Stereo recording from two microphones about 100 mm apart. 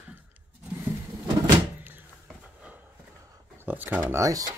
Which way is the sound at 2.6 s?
15° right (ahead or behind).